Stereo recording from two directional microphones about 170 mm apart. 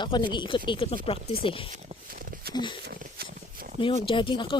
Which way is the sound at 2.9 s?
55° right (ahead or behind).